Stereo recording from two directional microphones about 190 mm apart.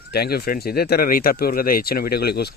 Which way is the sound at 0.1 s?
55° left (ahead or behind).